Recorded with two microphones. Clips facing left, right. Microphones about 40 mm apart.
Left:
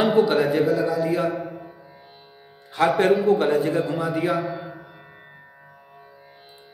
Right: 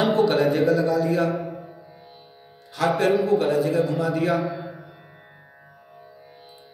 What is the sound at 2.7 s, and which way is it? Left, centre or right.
A man's voice, left.